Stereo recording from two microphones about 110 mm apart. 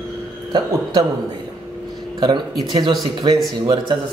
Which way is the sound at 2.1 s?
45° right (ahead or behind).